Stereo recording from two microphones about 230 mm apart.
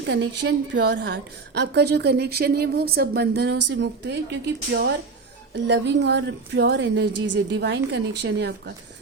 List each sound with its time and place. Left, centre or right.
0.0 s a woman's voice: right